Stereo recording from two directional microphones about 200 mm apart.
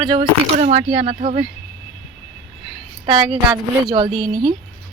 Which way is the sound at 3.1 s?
25° right (ahead or behind).